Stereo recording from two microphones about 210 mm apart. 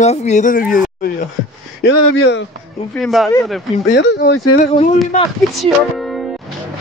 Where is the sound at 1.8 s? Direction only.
55° left (ahead or behind).